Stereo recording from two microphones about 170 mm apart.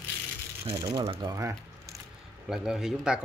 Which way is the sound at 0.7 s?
20° right (ahead or behind).